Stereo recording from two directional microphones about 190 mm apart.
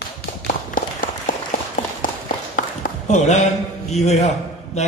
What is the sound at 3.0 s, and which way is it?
A man's voice, 40° left (ahead or behind).